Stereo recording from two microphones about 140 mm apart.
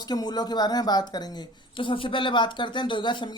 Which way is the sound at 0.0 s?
30° left (ahead or behind).